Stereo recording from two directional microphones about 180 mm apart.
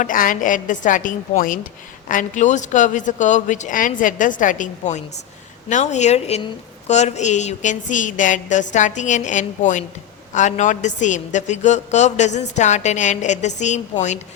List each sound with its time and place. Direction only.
0.0 s a woman's voice: 50° left (ahead or behind)